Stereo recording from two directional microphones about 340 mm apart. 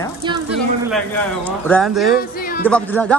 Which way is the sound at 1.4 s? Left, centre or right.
Centre.